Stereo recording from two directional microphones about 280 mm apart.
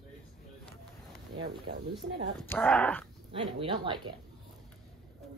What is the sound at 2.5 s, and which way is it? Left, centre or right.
Speech, centre.